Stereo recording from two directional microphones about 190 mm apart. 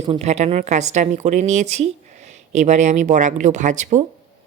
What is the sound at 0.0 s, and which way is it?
A woman's voice, 30° right (ahead or behind).